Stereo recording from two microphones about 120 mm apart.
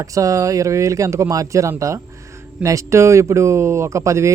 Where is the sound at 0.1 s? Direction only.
30° right (ahead or behind).